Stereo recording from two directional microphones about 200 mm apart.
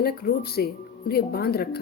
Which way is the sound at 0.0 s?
50° left (ahead or behind).